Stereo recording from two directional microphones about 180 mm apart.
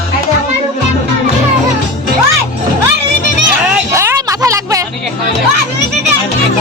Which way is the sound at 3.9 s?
15° right (ahead or behind).